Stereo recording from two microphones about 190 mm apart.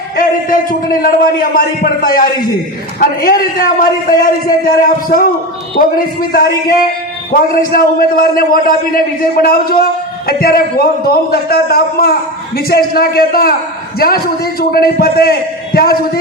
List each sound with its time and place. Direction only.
0.2 s a man's voice: 45° left (ahead or behind)